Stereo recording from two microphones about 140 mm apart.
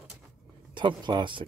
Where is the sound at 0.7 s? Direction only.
35° right (ahead or behind).